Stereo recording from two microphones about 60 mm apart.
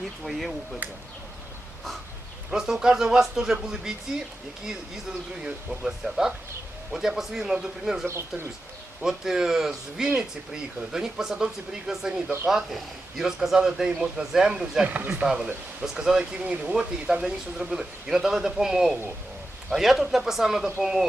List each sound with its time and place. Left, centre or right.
0.3 s speech: centre
2.5 s speech: centre
5.5 s speech: centre
9.0 s speech: centre
14.8 s speech: right
15.2 s speech: centre